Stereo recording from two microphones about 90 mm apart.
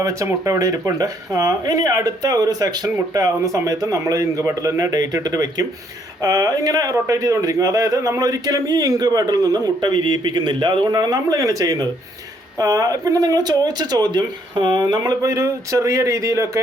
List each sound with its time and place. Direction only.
0.0 s speech: 35° right (ahead or behind); by 10.8 s 60° right (ahead or behind)
10.9 s speech: 45° right (ahead or behind)